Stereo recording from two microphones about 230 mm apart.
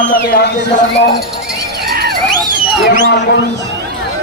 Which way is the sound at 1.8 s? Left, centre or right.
Right.